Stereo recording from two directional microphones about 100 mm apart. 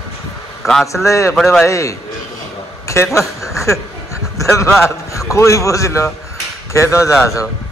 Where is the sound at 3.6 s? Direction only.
30° left (ahead or behind).